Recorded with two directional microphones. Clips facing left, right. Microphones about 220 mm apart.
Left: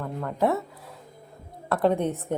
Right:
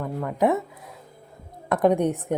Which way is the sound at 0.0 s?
10° right (ahead or behind).